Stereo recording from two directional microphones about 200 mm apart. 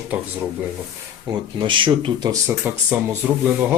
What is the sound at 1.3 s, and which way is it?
Speech, 25° right (ahead or behind).